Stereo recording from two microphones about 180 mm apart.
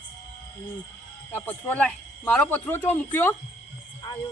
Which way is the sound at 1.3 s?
10° left (ahead or behind).